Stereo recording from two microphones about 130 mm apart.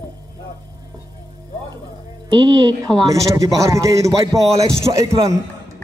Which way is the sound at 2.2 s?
30° right (ahead or behind).